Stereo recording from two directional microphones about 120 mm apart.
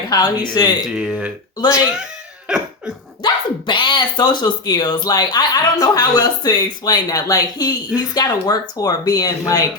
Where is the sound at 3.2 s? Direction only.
40° left (ahead or behind).